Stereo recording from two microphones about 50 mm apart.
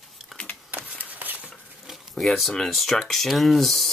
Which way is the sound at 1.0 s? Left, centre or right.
Right.